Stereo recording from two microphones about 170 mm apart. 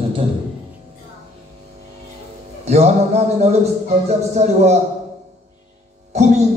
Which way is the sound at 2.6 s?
40° right (ahead or behind).